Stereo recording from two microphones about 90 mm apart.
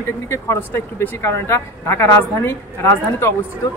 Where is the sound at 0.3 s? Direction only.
30° left (ahead or behind).